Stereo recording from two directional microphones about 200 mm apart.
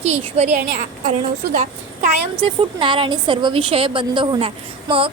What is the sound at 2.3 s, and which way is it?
A woman's voice, 25° right (ahead or behind).